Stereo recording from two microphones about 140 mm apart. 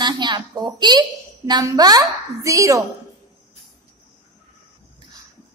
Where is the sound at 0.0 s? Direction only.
30° right (ahead or behind).